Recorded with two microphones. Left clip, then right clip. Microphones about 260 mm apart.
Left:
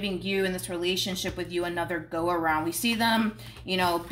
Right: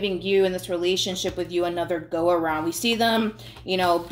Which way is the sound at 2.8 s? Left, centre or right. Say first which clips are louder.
Right 4 dB; left.